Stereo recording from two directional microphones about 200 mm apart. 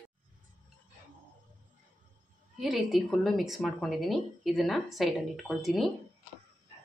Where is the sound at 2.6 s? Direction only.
Centre (ahead or behind).